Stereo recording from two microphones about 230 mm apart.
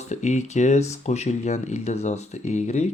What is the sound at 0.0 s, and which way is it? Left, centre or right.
Speech, left.